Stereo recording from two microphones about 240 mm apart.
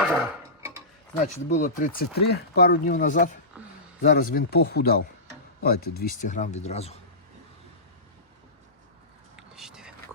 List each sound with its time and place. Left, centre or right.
0.0 s tick-tock: centre
1.5 s speech: left
9.3 s whispering: centre